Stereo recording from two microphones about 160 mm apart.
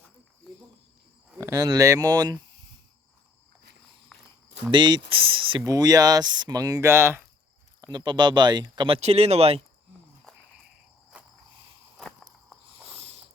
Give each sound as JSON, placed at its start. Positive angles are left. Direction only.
{"t": 1.4, "sound": "speech", "side_deg": -20}
{"t": 4.1, "sound": "a sound", "side_deg": 0}
{"t": 4.7, "sound": "speech", "side_deg": -30}
{"t": 7.8, "sound": "speech", "side_deg": -25}
{"t": 9.0, "sound": "speech", "side_deg": -40}
{"t": 11.1, "sound": "cricket", "side_deg": -5}
{"t": 11.9, "sound": "walk", "side_deg": 0}
{"t": 12.9, "sound": "a sound", "side_deg": -40}